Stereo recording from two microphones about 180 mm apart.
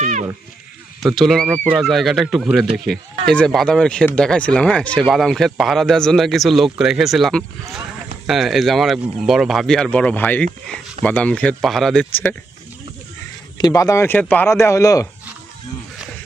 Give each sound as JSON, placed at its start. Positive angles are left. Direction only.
{"t": 0.0, "sound": "a sound", "side_deg": -40}
{"t": 1.0, "sound": "a man's voice", "side_deg": 0}
{"t": 13.6, "sound": "speech", "side_deg": 20}